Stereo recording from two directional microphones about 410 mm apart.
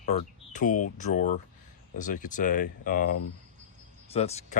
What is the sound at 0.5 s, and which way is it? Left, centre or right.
Speech, centre.